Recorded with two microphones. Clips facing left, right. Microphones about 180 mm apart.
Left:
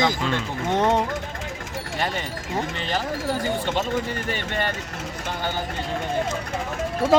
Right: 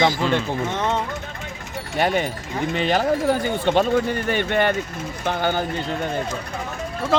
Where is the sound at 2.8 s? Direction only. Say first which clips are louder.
Right 7 dB; 55° right (ahead or behind).